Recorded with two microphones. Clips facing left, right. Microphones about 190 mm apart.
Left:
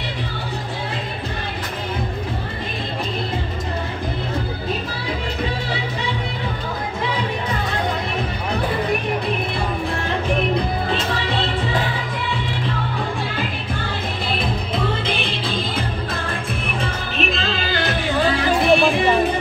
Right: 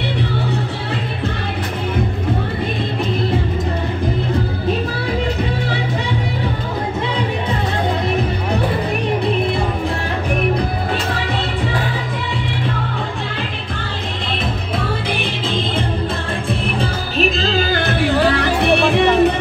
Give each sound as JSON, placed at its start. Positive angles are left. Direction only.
{"t": 15.0, "sound": "music", "side_deg": -15}
{"t": 16.4, "sound": "music", "side_deg": -35}